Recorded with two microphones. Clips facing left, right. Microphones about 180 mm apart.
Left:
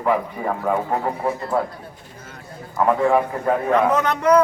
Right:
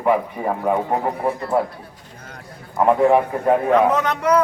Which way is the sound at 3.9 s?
Centre (ahead or behind).